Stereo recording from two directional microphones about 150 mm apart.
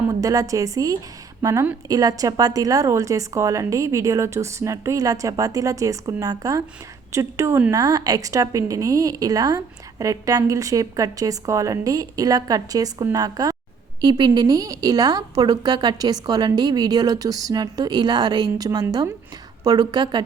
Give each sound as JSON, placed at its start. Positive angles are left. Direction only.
{"t": 0.1, "sound": "a woman's voice", "side_deg": -20}